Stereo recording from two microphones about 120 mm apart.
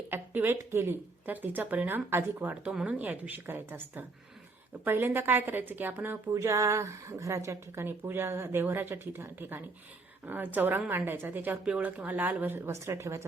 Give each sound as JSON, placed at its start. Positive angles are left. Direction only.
{"t": 0.1, "sound": "a woman's voice", "side_deg": -15}